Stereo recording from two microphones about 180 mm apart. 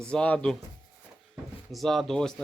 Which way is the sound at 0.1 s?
5° left (ahead or behind).